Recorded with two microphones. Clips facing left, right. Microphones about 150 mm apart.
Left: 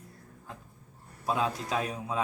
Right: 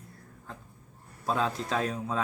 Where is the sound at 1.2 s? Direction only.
10° left (ahead or behind).